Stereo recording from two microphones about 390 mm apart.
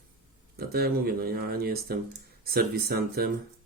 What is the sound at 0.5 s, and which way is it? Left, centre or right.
Speech, right.